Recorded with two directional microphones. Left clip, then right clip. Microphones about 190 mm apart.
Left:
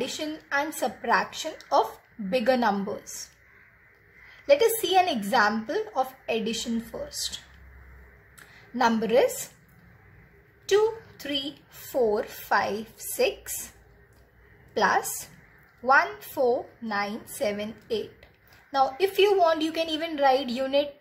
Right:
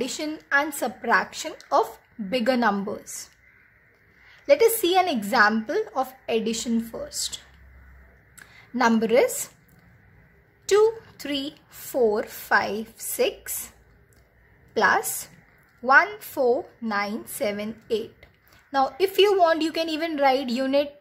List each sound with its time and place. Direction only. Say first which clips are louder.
0.0 s a woman's voice: right 2 dB; 20° right (ahead or behind)
4.5 s a woman's voice: right 2 dB; 20° right (ahead or behind)
8.7 s a woman's voice: right 2 dB; 20° right (ahead or behind)
10.7 s a woman's voice: right 4 dB; 25° right (ahead or behind)
14.7 s a woman's voice: right 3 dB; 20° right (ahead or behind)